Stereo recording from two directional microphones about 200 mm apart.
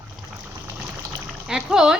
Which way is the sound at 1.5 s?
5° right (ahead or behind).